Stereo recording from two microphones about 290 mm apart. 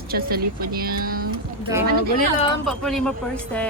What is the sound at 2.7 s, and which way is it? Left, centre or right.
Speech, centre.